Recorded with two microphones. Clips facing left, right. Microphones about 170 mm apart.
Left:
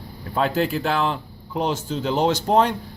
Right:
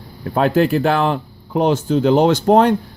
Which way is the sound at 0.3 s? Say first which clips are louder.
Right 7 dB; 55° right (ahead or behind).